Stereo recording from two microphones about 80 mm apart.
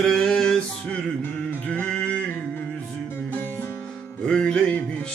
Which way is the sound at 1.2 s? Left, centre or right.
Left.